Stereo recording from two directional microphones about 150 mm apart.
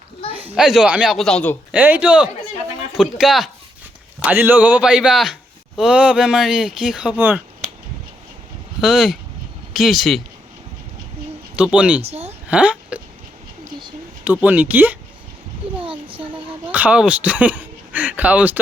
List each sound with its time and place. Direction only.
0.5 s speech: 5° right (ahead or behind)
1.7 s speech: 10° right (ahead or behind)
4.2 s speech: 10° right (ahead or behind)
8.8 s speech: centre (ahead or behind)
11.5 s speech: 5° right (ahead or behind)
12.0 s a woman's voice: 45° right (ahead or behind)
12.5 s a sound: 10° right (ahead or behind)
14.3 s speech: 10° right (ahead or behind)
15.8 s a sound: 35° right (ahead or behind)
16.6 s speech: 10° right (ahead or behind)